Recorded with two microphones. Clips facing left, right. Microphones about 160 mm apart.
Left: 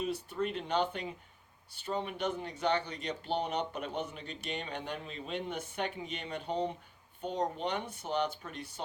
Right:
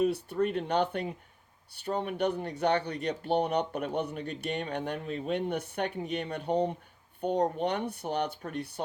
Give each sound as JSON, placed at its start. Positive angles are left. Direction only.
{"t": 0.0, "sound": "speech", "side_deg": -60}